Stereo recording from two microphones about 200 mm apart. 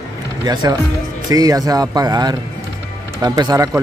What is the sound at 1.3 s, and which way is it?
Speech, 20° right (ahead or behind).